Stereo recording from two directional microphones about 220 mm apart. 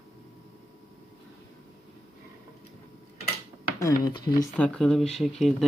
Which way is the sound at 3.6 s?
15° left (ahead or behind).